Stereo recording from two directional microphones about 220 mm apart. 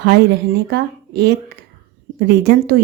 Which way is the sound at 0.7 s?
50° right (ahead or behind).